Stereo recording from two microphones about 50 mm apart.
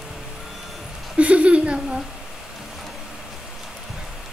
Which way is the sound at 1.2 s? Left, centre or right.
Right.